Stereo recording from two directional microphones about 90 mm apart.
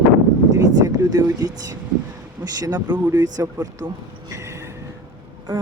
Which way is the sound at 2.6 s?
50° right (ahead or behind).